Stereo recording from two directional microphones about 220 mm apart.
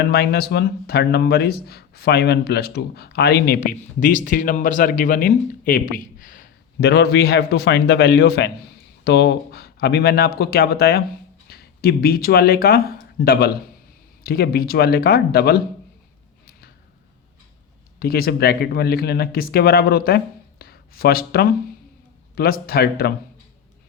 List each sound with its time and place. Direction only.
0.0 s speech: 45° left (ahead or behind)
16.5 s a sound: 45° left (ahead or behind)
18.0 s speech: 45° left (ahead or behind)